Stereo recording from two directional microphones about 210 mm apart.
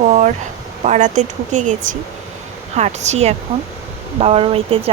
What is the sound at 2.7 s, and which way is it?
Speech, 30° right (ahead or behind).